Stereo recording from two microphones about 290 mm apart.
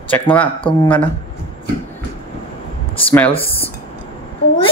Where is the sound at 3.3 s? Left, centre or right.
Centre.